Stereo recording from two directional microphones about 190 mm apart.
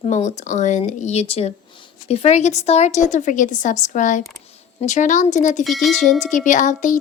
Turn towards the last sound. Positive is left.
turn(degrees=45)  # may be behind; listen again after turning